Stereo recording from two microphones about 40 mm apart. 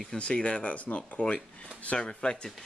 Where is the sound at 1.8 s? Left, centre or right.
Left.